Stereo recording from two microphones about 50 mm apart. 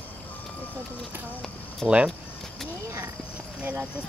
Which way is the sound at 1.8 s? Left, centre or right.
Centre.